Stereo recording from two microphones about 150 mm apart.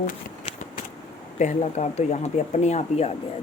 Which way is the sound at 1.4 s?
50° left (ahead or behind).